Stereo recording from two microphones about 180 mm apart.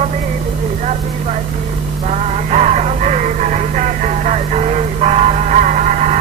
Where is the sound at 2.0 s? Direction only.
40° right (ahead or behind).